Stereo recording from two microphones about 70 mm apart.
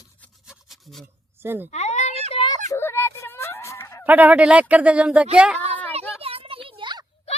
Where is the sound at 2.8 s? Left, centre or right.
Left.